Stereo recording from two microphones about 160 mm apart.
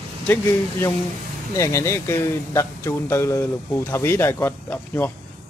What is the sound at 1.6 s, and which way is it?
Speech, 20° left (ahead or behind).